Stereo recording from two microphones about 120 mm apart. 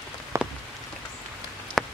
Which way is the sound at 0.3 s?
25° right (ahead or behind).